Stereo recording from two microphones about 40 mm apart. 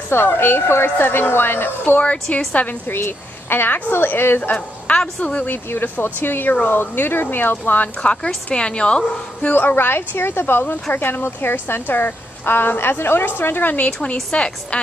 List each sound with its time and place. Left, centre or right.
0.4 s speech: left
2.0 s a woman's voice: left
2.9 s speech: left
4.6 s a woman's voice: left
5.7 s speech: left
8.0 s a woman's voice: left
9.4 s speech: left
13.4 s speech: left
14.3 s a woman's voice: left